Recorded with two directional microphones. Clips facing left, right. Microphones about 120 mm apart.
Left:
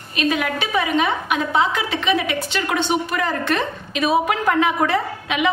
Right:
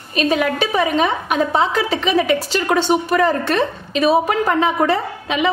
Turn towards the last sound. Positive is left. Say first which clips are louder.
# right 2 dB
turn(degrees=-35)  # may be behind; listen again after turning